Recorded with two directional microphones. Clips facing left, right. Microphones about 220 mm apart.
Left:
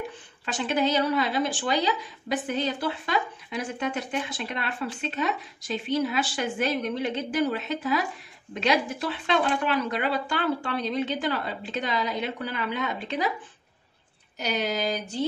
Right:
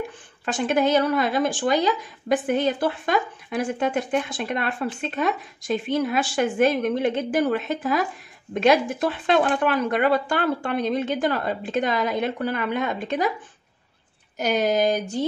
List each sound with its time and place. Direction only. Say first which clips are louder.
0.5 s speech: right 5 dB; 50° right (ahead or behind)
14.4 s speech: right 7 dB; 50° right (ahead or behind)